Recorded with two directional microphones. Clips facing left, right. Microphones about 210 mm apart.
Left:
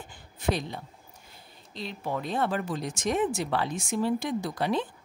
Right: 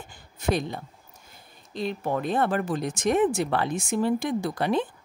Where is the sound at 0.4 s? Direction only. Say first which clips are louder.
Right 3 dB; 50° right (ahead or behind).